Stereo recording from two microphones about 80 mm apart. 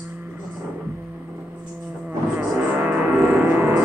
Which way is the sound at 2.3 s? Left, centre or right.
Right.